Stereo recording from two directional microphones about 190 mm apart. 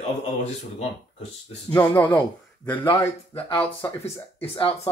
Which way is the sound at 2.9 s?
20° left (ahead or behind).